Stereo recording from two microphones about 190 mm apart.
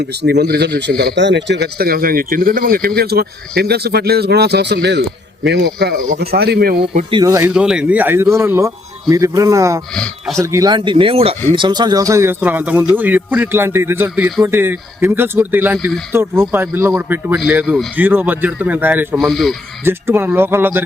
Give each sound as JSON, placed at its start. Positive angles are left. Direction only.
{"t": 0.0, "sound": "speech", "side_deg": -60}
{"t": 6.1, "sound": "speech", "side_deg": -55}
{"t": 7.1, "sound": "speech", "side_deg": -20}
{"t": 7.5, "sound": "speech", "side_deg": -5}
{"t": 9.9, "sound": "speech", "side_deg": 0}
{"t": 10.4, "sound": "speech", "side_deg": -15}
{"t": 19.1, "sound": "speech", "side_deg": 0}
{"t": 19.8, "sound": "speech", "side_deg": -10}